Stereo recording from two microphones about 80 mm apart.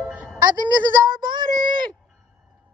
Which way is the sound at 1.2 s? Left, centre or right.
Right.